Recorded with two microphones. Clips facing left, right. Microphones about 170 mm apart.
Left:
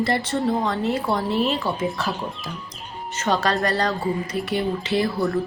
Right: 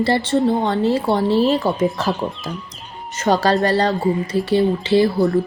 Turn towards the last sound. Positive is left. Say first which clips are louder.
# right 7 dB
turn(degrees=-25)  # may be behind; listen again after turning